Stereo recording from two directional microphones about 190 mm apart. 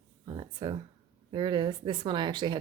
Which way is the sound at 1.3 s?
25° right (ahead or behind).